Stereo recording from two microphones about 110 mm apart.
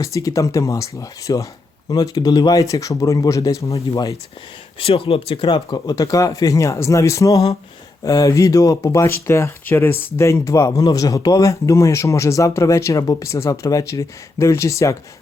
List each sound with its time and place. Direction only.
0.0 s speech: 30° left (ahead or behind)
4.8 s speech: 60° left (ahead or behind); by 14.9 s 30° left (ahead or behind)